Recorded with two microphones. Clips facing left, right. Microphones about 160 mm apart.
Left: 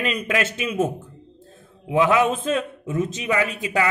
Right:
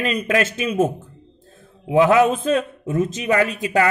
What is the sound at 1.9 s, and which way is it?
A man's voice, 40° right (ahead or behind).